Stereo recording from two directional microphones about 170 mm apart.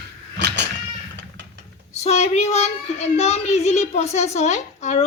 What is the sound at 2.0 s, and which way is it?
A child's voice, 40° left (ahead or behind).